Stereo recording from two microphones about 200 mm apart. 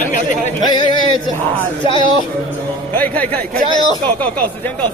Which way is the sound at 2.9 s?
10° left (ahead or behind).